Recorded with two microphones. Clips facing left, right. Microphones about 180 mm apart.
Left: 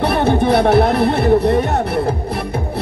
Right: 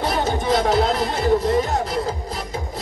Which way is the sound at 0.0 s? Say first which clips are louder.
Left 7 dB; 65° left (ahead or behind).